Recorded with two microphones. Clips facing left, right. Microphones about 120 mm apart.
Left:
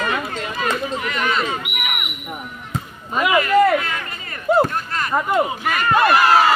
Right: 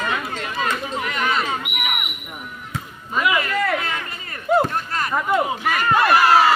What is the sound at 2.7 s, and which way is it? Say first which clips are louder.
Basketball bounce: left 2 dB; 40° left (ahead or behind).